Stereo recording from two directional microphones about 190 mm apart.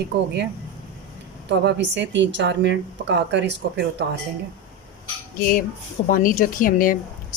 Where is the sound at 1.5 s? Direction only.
65° right (ahead or behind).